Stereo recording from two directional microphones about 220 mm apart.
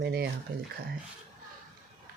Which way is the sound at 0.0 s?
45° right (ahead or behind).